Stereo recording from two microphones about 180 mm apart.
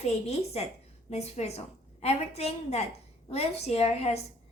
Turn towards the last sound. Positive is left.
turn(degrees=35)  # may be behind; listen again after turning